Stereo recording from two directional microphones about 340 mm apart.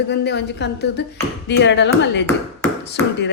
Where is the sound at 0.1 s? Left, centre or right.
Left.